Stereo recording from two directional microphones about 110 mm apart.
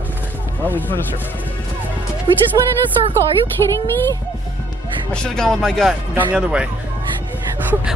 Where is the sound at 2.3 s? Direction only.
55° right (ahead or behind).